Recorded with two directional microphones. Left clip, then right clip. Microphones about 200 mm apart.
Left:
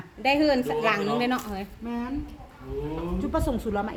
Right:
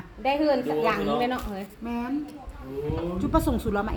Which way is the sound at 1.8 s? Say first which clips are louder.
Right 3 dB; 30° right (ahead or behind).